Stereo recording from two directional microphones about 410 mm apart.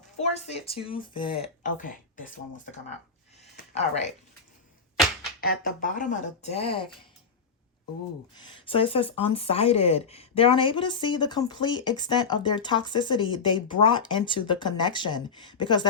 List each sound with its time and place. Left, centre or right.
0.2 s speech: centre
5.4 s speech: left
8.4 s speech: centre